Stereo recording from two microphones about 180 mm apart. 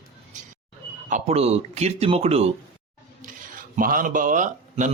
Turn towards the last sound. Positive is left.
turn(degrees=-45)  # may be behind; listen again after turning